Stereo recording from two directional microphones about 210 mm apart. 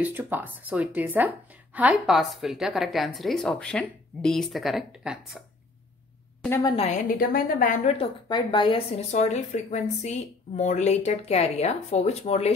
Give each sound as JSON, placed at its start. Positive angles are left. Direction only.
{"t": 0.0, "sound": "a woman's voice", "side_deg": -10}
{"t": 6.8, "sound": "speech", "side_deg": 40}
{"t": 8.0, "sound": "speech", "side_deg": 20}